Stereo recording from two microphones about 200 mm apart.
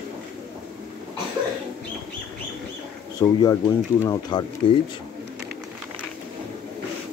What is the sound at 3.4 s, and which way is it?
Speech, 15° left (ahead or behind).